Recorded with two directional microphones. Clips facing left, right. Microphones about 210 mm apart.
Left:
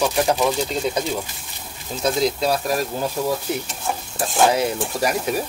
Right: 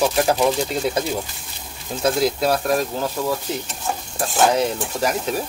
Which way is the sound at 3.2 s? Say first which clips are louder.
Left 1 dB; 20° left (ahead or behind).